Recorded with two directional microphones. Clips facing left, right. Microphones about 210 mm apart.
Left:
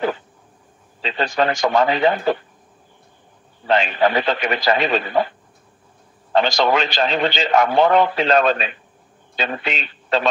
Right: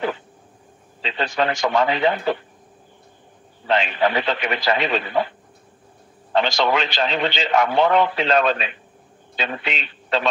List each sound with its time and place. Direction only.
1.0 s a man's voice: 40° left (ahead or behind)
3.6 s a man's voice: 40° left (ahead or behind)
6.3 s a man's voice: 40° left (ahead or behind)